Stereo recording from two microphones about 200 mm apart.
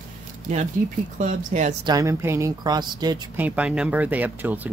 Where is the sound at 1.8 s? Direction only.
15° right (ahead or behind).